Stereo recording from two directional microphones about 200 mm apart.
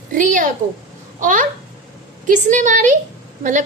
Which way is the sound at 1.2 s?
40° right (ahead or behind).